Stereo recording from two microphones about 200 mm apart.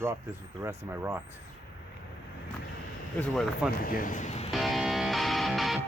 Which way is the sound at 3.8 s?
45° left (ahead or behind).